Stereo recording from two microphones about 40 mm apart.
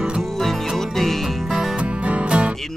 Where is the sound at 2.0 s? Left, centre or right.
Right.